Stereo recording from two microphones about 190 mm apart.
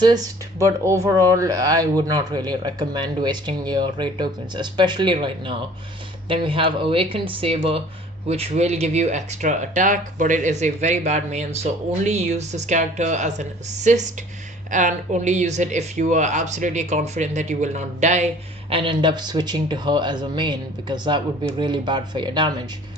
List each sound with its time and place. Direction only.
0.6 s a man's voice: 15° right (ahead or behind); by 18.3 s 35° right (ahead or behind)
18.7 s a man's voice: 25° right (ahead or behind)